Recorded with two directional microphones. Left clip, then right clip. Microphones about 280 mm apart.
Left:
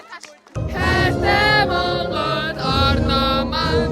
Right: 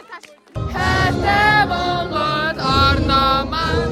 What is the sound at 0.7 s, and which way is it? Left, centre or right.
Music, centre.